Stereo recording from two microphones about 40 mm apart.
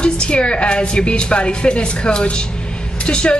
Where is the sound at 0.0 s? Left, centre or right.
Left.